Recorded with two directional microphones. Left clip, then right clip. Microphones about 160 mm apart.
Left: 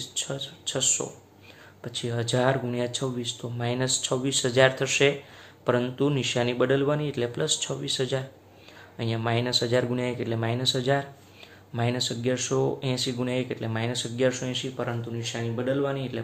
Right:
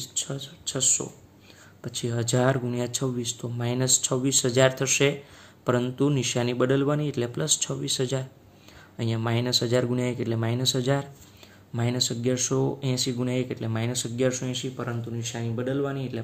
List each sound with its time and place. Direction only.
0.0 s speech: 35° right (ahead or behind)